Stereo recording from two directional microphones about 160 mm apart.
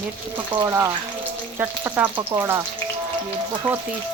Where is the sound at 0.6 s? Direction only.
15° right (ahead or behind).